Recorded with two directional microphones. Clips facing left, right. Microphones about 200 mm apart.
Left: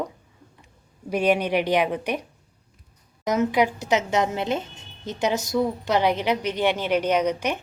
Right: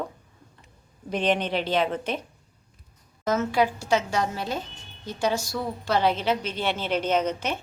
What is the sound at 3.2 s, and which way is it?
A woman's voice, 15° left (ahead or behind).